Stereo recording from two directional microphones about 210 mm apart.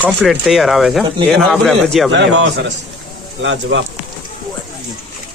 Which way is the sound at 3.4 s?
60° right (ahead or behind).